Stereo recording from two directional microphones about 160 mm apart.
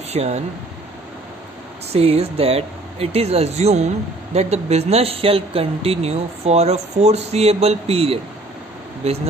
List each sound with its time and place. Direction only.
0.1 s speech: 45° right (ahead or behind)
1.9 s speech: 40° right (ahead or behind)